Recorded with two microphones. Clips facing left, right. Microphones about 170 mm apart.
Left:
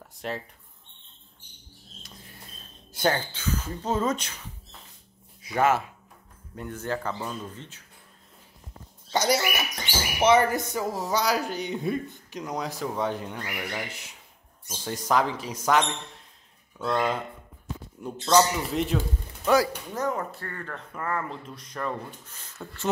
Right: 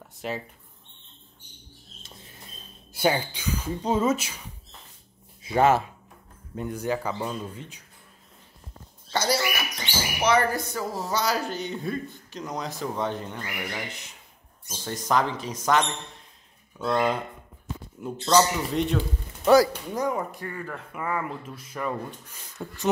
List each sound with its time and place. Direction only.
0.2 s speech: 5° right (ahead or behind)
2.9 s speech: 10° right (ahead or behind)
5.4 s speech: 30° right (ahead or behind)
6.5 s speech: 15° right (ahead or behind)
9.1 s a sound: 20° left (ahead or behind)
10.2 s speech: 20° left (ahead or behind)
16.7 s speech: centre (ahead or behind)
19.4 s speech: 35° right (ahead or behind)
19.9 s speech: 10° right (ahead or behind)